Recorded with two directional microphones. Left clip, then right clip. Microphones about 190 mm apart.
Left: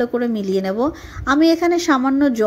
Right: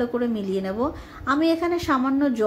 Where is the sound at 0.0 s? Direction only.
40° left (ahead or behind).